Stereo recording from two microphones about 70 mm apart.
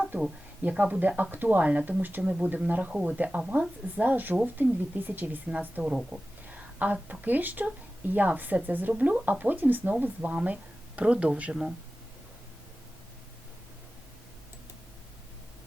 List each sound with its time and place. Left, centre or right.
0.6 s speech: centre
6.5 s speech: right